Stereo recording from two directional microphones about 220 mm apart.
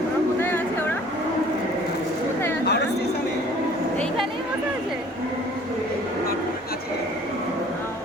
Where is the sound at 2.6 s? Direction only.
50° left (ahead or behind).